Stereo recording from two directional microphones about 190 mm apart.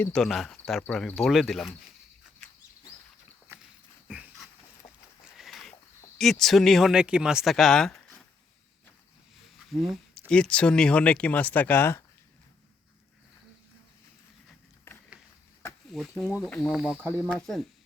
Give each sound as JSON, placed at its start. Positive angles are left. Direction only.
{"t": 0.0, "sound": "speech", "side_deg": 5}
{"t": 4.1, "sound": "dog", "side_deg": -5}
{"t": 4.8, "sound": "a sound", "side_deg": 30}
{"t": 5.4, "sound": "a sound", "side_deg": 0}
{"t": 6.1, "sound": "speech", "side_deg": 0}
{"t": 9.7, "sound": "speech", "side_deg": 0}
{"t": 15.9, "sound": "speech", "side_deg": 0}